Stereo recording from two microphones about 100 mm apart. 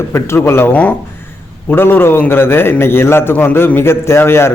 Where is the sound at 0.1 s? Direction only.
25° left (ahead or behind).